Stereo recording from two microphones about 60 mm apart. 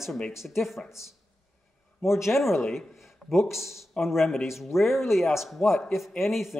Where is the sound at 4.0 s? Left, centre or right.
Centre.